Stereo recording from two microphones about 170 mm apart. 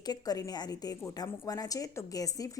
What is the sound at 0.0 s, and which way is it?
A woman's voice, 25° left (ahead or behind).